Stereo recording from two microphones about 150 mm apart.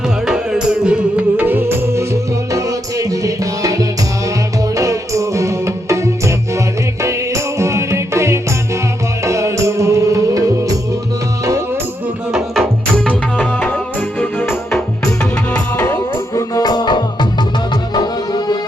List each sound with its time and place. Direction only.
0.3 s music: 5° right (ahead or behind); by 10.8 s 20° right (ahead or behind)
12.3 s music: 5° left (ahead or behind); by 18.5 s 25° left (ahead or behind)